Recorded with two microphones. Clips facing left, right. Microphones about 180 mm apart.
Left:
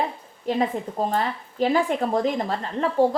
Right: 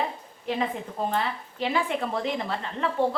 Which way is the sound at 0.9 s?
40° left (ahead or behind).